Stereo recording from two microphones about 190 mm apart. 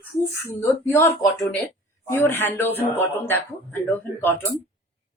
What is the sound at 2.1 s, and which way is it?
A man's voice, 10° left (ahead or behind).